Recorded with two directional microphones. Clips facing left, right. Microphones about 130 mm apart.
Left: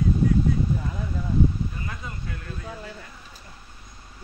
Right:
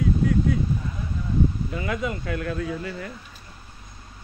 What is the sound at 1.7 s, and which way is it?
Speech, 90° right.